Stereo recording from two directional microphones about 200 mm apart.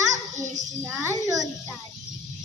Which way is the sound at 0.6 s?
15° right (ahead or behind).